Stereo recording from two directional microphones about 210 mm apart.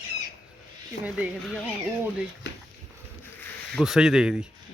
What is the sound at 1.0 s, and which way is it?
Speech, 5° right (ahead or behind).